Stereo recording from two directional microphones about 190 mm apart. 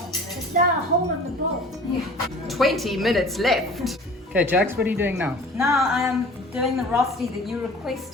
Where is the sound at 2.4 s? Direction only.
Centre (ahead or behind).